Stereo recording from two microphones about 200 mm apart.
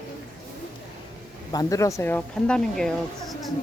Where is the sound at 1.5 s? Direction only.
15° left (ahead or behind).